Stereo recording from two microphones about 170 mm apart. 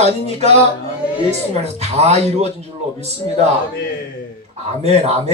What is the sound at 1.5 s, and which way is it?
Speech, 40° right (ahead or behind).